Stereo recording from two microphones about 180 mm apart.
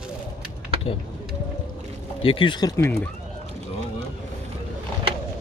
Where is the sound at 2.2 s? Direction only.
30° left (ahead or behind).